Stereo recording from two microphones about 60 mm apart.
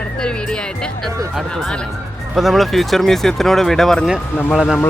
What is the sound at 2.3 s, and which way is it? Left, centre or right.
Speech, centre.